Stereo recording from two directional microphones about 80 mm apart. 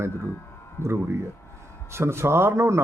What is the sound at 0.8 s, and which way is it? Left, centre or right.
Speech, right.